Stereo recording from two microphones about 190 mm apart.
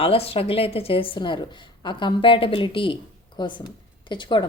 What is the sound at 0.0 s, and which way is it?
A woman's voice, 30° left (ahead or behind).